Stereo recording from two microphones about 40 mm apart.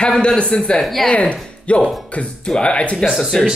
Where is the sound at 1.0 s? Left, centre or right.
Left.